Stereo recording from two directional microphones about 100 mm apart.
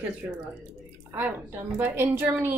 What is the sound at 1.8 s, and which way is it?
Speech, 20° right (ahead or behind).